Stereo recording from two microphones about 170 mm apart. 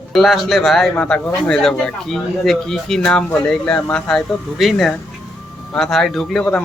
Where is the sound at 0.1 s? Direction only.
Centre (ahead or behind).